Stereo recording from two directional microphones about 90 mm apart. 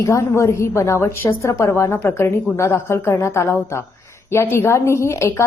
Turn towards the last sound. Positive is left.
turn(degrees=30)  # may be behind; listen again after turning